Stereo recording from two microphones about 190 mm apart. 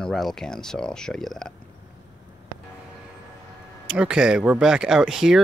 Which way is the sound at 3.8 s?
5° right (ahead or behind).